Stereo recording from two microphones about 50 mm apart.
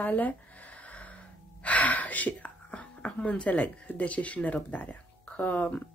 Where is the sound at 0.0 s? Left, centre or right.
Left.